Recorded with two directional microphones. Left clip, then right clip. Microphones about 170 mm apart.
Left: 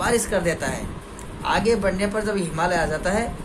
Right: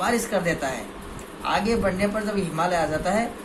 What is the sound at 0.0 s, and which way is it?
Speech, 65° left (ahead or behind).